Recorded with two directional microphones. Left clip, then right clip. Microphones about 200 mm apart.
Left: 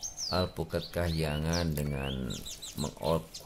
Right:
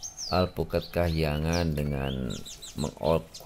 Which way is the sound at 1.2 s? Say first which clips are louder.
Right 4 dB; 10° right (ahead or behind).